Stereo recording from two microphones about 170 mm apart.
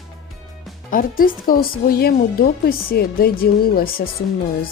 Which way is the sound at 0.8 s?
55° left (ahead or behind).